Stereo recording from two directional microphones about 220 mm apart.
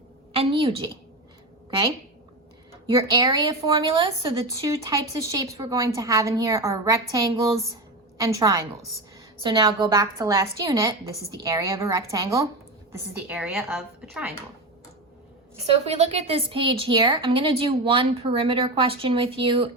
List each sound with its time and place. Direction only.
0.3 s a woman's voice: 25° right (ahead or behind)
2.8 s speech: 20° right (ahead or behind); by 14.3 s centre (ahead or behind)
15.6 s a woman's voice: 30° right (ahead or behind)